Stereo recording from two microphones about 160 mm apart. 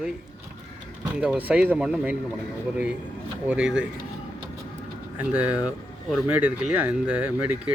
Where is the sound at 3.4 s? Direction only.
5° right (ahead or behind).